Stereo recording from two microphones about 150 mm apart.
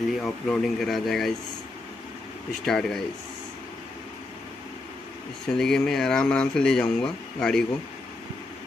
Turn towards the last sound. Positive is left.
turn(degrees=5)  # may be behind; listen again after turning